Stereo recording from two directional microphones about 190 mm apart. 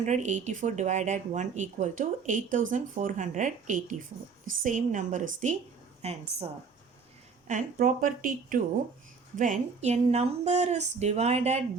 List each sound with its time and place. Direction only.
0.0 s speech: 40° right (ahead or behind)
7.4 s speech: 40° right (ahead or behind)